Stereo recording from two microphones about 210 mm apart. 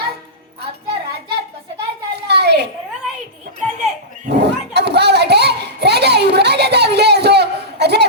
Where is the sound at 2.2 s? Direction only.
50° right (ahead or behind).